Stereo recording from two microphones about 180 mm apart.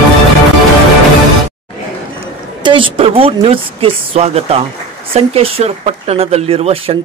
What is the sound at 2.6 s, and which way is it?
Speech, 30° right (ahead or behind).